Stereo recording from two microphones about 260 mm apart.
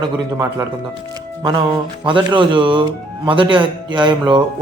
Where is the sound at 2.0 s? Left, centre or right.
Centre.